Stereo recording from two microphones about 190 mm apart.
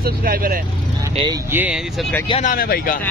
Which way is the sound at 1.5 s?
10° right (ahead or behind).